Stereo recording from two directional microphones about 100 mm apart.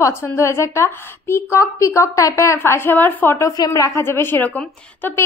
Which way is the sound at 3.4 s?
35° left (ahead or behind).